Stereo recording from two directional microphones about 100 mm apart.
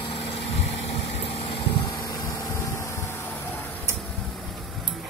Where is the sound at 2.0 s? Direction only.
30° left (ahead or behind).